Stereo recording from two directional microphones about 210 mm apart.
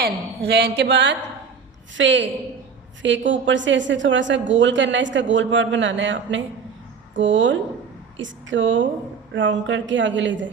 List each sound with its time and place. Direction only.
0.0 s a man's voice: 50° right (ahead or behind)